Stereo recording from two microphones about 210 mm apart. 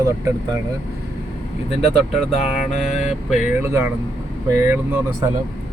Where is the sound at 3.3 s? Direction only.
10° right (ahead or behind).